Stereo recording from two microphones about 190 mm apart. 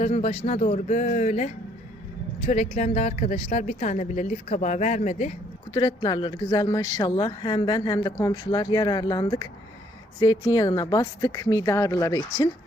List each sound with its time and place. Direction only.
0.0 s a woman's voice: 35° left (ahead or behind)
5.7 s speech: 20° left (ahead or behind)
10.5 s speech: 20° left (ahead or behind)